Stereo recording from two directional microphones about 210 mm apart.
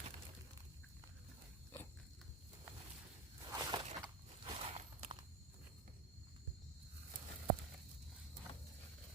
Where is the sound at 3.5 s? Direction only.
20° right (ahead or behind).